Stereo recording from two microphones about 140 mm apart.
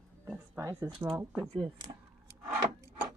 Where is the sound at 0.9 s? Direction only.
40° right (ahead or behind).